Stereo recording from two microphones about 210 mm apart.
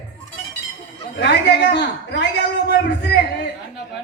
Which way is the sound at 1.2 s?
55° left (ahead or behind).